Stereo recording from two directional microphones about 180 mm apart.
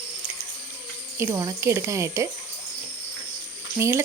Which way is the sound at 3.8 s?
15° right (ahead or behind).